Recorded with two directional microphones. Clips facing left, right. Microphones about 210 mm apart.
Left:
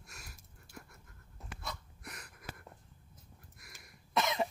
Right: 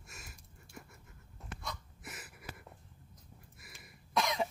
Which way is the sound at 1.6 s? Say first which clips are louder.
Left 1 dB; centre (ahead or behind).